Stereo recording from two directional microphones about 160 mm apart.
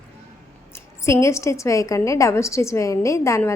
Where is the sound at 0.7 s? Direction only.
20° left (ahead or behind).